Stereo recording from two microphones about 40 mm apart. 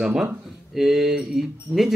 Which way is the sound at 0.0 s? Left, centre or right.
Centre.